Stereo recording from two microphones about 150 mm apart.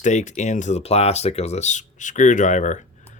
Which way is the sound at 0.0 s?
55° left (ahead or behind).